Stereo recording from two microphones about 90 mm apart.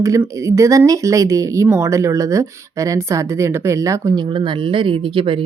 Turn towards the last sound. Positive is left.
turn(degrees=-75)  # may be behind; listen again after turning